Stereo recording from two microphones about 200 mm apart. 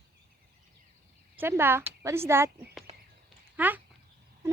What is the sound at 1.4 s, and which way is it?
Speech, 10° right (ahead or behind).